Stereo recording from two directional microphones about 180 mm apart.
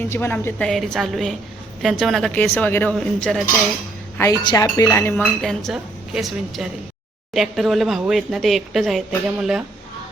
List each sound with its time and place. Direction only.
0.1 s speech: 10° left (ahead or behind)
4.2 s speech: 20° left (ahead or behind)
5.4 s speech: centre (ahead or behind)